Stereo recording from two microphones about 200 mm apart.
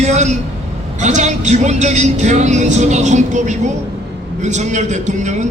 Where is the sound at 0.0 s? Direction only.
35° right (ahead or behind).